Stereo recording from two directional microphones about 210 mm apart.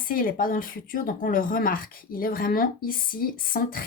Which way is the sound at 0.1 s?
40° left (ahead or behind).